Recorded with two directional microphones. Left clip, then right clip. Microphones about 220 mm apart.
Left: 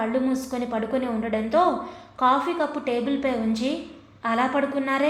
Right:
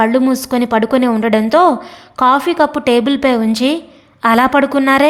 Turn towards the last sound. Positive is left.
turn(degrees=-55)  # may be behind; listen again after turning